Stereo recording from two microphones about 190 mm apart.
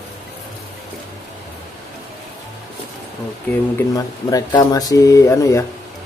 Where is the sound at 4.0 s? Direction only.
20° left (ahead or behind).